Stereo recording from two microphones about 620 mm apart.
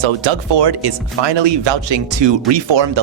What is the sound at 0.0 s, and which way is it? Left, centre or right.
Speech, right.